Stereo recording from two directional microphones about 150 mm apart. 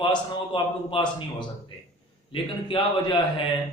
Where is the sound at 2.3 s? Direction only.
35° left (ahead or behind).